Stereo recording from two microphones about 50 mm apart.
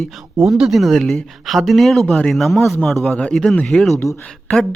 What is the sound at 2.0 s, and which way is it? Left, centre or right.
Speech, centre.